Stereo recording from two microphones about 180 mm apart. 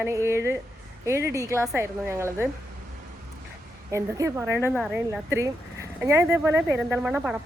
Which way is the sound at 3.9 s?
15° right (ahead or behind).